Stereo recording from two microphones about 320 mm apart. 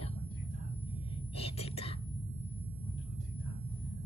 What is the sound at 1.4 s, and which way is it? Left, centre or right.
Whispering, centre.